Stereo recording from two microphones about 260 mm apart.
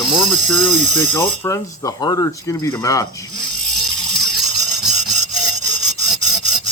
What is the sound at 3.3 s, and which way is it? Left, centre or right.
Mechanisms, centre.